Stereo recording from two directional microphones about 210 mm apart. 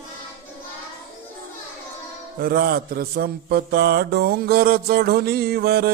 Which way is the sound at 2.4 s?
45° right (ahead or behind).